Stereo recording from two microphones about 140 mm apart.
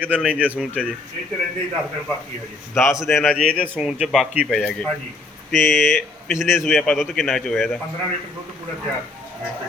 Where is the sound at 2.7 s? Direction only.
20° left (ahead or behind).